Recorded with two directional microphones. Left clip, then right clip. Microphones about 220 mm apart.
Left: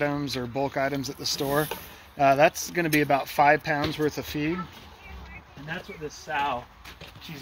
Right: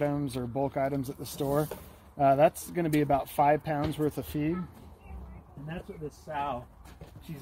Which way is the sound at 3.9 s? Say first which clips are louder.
Left 4 dB; 20° right (ahead or behind).